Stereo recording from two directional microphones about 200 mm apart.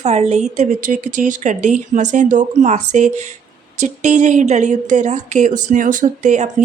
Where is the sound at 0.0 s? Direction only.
35° right (ahead or behind).